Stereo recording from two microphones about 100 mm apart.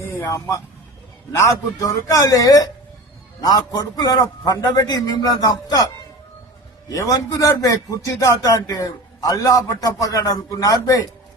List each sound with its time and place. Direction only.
0.3 s a man's voice: 30° left (ahead or behind)
6.8 s a man's voice: 35° left (ahead or behind)